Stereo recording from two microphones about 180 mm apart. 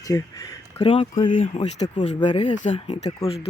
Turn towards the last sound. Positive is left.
turn(degrees=40)  # may be behind; listen again after turning